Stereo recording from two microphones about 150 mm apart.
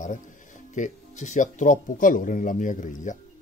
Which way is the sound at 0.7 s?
55° left (ahead or behind).